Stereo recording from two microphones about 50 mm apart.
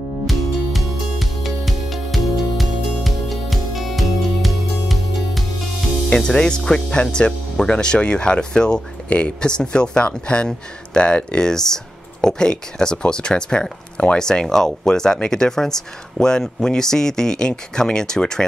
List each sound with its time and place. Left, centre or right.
0.3 s music: centre
6.0 s speech: left